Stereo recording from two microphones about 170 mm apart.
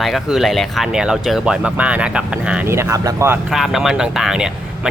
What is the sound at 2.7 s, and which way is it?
Speech, 15° right (ahead or behind).